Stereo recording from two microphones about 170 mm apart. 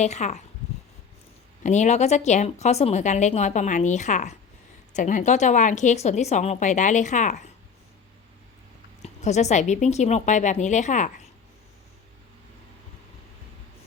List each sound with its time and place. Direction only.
0.0 s a woman's voice: 40° left (ahead or behind)
1.6 s a woman's voice: 45° left (ahead or behind)
9.0 s a woman's voice: 40° left (ahead or behind)